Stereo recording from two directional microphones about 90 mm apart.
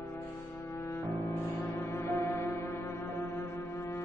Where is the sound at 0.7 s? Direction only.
30° left (ahead or behind).